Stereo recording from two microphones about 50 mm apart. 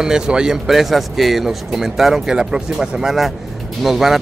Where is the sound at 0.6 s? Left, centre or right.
Centre.